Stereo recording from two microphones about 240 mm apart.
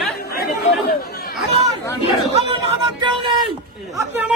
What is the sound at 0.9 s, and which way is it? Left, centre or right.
Chatter, left.